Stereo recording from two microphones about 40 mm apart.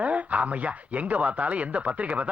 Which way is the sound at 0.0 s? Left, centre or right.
Right.